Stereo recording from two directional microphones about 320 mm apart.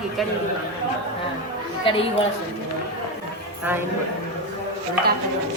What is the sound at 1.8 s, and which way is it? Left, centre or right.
Speech, centre.